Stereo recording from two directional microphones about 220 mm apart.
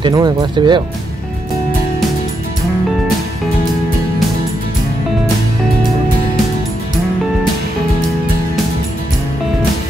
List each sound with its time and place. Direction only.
0.0 s speech: 20° right (ahead or behind)